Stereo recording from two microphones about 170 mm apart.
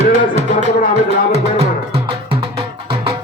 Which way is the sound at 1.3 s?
35° right (ahead or behind).